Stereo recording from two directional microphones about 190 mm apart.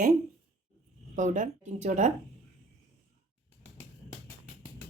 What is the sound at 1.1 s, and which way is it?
Speech, 40° right (ahead or behind).